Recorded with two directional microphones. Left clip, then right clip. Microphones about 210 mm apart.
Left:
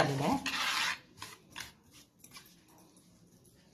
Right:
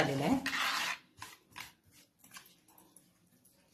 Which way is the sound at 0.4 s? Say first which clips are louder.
Even; 5° left (ahead or behind).